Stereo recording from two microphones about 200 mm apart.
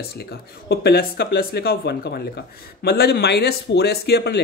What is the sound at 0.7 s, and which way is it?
Speech, 55° left (ahead or behind).